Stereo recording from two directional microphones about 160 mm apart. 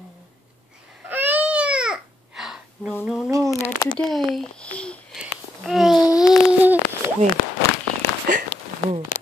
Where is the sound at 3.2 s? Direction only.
20° right (ahead or behind).